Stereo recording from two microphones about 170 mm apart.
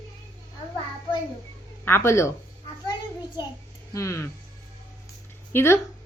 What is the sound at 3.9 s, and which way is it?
Speech, 15° left (ahead or behind).